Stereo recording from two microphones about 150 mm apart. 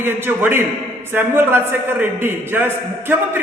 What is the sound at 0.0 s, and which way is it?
A man's voice, 15° right (ahead or behind).